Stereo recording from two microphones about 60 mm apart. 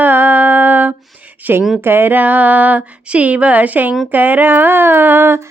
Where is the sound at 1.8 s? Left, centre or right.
Right.